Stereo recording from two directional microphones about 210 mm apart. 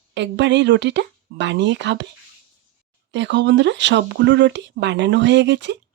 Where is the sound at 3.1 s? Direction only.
60° right (ahead or behind).